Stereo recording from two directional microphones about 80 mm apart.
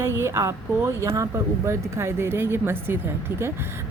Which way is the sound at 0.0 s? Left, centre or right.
Right.